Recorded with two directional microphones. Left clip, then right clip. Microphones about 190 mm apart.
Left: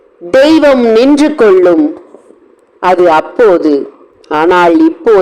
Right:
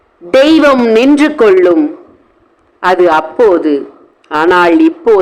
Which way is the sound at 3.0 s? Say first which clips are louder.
Left 2 dB; 5° left (ahead or behind).